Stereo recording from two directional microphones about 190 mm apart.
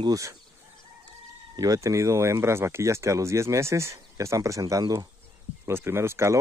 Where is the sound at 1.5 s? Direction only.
20° right (ahead or behind).